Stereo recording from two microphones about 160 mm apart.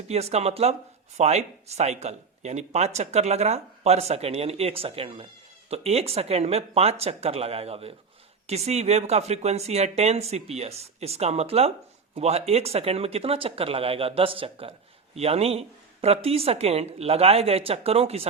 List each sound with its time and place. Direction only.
0.1 s speech: 40° right (ahead or behind)